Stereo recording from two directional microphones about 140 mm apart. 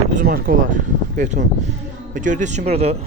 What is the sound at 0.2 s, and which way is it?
A man's voice, 90° right.